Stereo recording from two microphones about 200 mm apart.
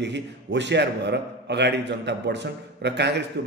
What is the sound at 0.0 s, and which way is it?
A man's voice, 60° right (ahead or behind).